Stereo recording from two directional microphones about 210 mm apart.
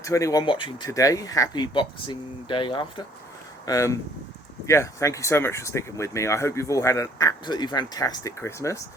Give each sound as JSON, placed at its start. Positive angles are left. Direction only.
{"t": 0.0, "sound": "speech", "side_deg": 15}